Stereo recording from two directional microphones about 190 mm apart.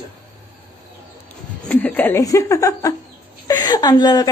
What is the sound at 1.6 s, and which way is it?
Speech, 10° left (ahead or behind).